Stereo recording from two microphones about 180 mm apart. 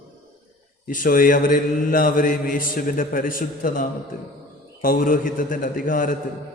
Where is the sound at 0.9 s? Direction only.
50° left (ahead or behind).